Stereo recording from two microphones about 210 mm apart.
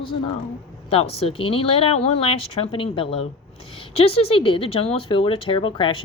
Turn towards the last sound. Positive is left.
turn(degrees=25)  # may be behind; listen again after turning